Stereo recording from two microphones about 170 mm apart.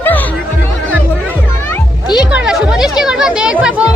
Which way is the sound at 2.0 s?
25° left (ahead or behind).